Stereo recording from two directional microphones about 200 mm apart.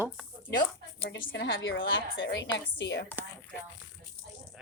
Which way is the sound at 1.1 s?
60° left (ahead or behind).